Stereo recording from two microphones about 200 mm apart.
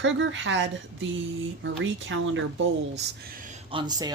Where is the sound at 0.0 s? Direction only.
70° right (ahead or behind).